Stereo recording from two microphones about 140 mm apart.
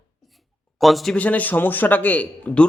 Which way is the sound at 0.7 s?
Centre (ahead or behind).